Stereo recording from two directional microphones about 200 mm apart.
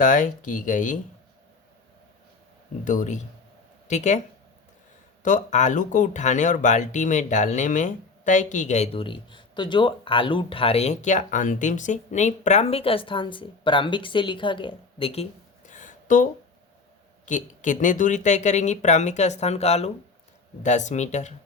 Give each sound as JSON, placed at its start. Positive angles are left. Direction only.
{"t": 0.0, "sound": "speech", "side_deg": 40}
{"t": 2.8, "sound": "speech", "side_deg": 40}
{"t": 5.2, "sound": "speech", "side_deg": 35}